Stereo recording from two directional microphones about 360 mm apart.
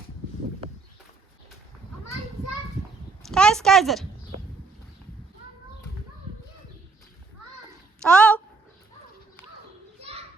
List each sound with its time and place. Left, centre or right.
3.2 s speech: centre
8.0 s a sound: centre
10.0 s children playing: centre